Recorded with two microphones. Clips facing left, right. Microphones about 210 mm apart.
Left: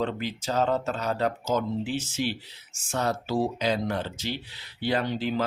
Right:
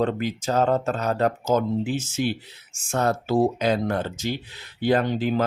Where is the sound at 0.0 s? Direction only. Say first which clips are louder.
Right 5 dB; 45° right (ahead or behind).